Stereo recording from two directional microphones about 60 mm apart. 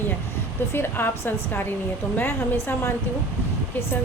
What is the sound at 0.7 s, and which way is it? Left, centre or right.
A woman's voice, left.